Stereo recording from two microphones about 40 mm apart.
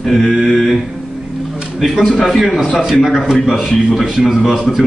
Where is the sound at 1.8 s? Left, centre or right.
Centre.